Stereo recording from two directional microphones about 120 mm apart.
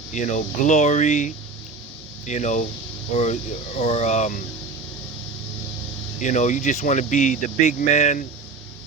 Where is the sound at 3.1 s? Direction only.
65° left (ahead or behind); by 4.4 s 85° left.